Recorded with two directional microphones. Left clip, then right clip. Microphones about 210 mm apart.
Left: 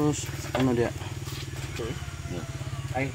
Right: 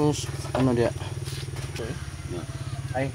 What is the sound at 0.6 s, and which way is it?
Speech, 40° right (ahead or behind).